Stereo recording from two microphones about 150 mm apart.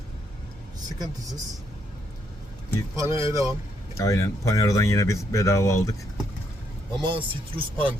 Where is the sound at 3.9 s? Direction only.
20° left (ahead or behind).